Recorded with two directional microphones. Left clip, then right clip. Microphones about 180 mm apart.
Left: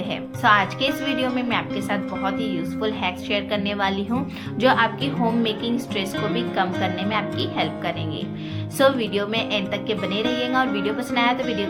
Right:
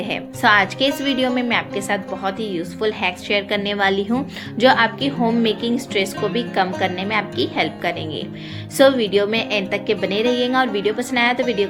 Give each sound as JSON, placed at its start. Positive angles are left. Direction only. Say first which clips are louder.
{"t": 0.1, "sound": "a woman's voice", "louder": "right 2 dB", "side_deg": -40}